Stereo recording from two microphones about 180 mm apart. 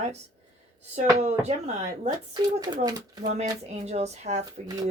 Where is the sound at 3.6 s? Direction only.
40° right (ahead or behind).